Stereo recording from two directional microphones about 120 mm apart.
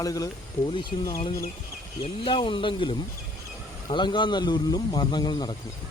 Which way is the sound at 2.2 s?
45° left (ahead or behind).